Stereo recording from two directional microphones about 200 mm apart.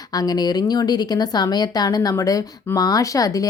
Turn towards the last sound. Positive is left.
turn(degrees=15)  # may be behind; listen again after turning